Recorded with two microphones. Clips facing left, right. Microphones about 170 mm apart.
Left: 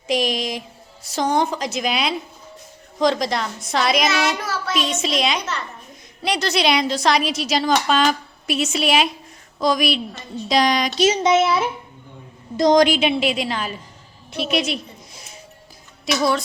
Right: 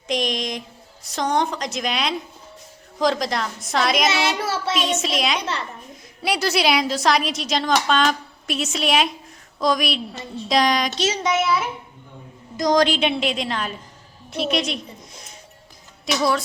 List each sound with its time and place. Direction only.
0.1 s music: 5° left (ahead or behind)
1.0 s a woman's voice: centre (ahead or behind)
4.1 s child singing: 30° right (ahead or behind)
4.7 s a woman's voice: centre (ahead or behind)
11.0 s a woman's voice: 20° left (ahead or behind)
12.8 s a woman's voice: 5° left (ahead or behind)
14.3 s a sound: 5° left (ahead or behind)
16.1 s a woman's voice: centre (ahead or behind)